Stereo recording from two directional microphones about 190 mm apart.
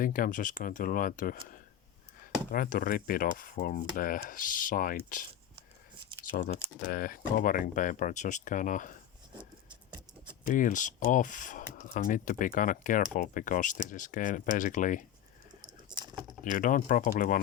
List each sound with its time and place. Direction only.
0.0 s speech: 45° left (ahead or behind)
2.5 s speech: 50° left (ahead or behind)
6.3 s speech: 45° left (ahead or behind)
9.4 s a sound: 25° right (ahead or behind)
10.4 s speech: 45° left (ahead or behind)
15.9 s typing: 25° right (ahead or behind)
16.4 s speech: 45° left (ahead or behind)